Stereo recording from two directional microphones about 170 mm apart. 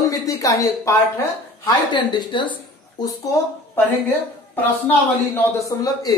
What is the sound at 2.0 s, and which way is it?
Speech, 25° left (ahead or behind).